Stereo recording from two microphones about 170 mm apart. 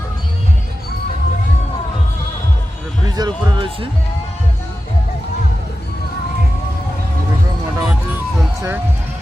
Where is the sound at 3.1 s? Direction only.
25° right (ahead or behind).